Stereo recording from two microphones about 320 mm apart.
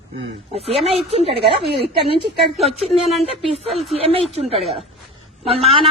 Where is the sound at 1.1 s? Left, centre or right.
Centre.